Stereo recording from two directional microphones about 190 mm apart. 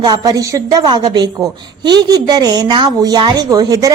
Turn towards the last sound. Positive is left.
turn(degrees=-20)  # may be behind; listen again after turning